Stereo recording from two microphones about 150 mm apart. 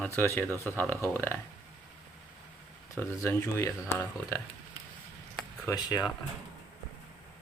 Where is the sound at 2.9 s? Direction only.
20° left (ahead or behind).